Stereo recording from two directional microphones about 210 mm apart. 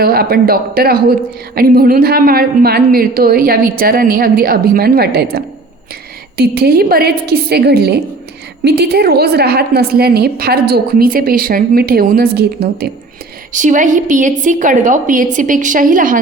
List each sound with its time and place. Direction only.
0.0 s a woman's voice: 45° right (ahead or behind)
13.5 s a woman's voice: 35° right (ahead or behind)